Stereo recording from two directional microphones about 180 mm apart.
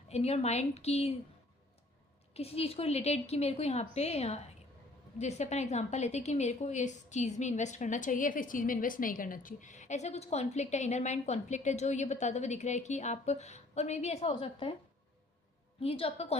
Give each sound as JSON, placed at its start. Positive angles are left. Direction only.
{"t": 0.1, "sound": "a woman's voice", "side_deg": 35}
{"t": 2.3, "sound": "a woman's voice", "side_deg": 35}
{"t": 15.8, "sound": "a woman's voice", "side_deg": 30}